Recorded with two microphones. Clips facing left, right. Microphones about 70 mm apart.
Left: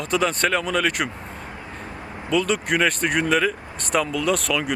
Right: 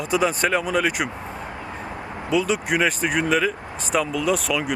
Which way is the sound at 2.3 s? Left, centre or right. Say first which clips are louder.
Even; centre.